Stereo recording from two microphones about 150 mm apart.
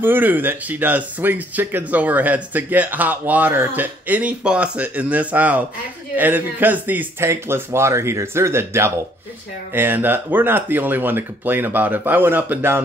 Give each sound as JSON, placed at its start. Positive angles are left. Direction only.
{"t": 0.0, "sound": "speech", "side_deg": -15}